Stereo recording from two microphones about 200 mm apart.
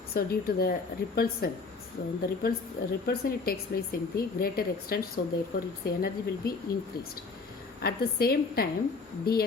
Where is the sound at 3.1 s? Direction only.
50° left (ahead or behind).